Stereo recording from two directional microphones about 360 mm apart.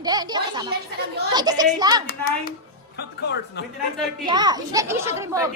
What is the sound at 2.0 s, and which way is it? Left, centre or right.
Speech, left.